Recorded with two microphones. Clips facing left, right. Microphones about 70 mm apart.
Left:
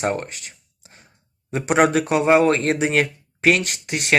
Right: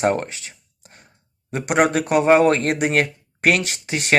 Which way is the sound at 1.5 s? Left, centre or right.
Centre.